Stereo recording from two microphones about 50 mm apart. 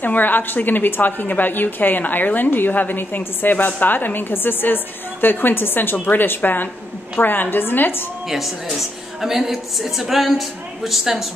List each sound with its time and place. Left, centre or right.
0.0 s a woman's voice: left
8.7 s a woman's voice: centre